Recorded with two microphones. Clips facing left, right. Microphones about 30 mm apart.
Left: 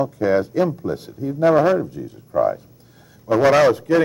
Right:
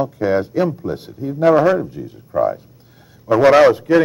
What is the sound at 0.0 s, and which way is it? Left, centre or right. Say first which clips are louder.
Speech: right 1 dB; centre.